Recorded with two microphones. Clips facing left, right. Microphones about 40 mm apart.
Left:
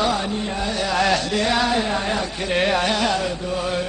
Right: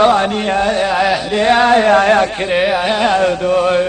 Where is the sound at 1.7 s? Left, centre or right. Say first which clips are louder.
Right 12 dB; right.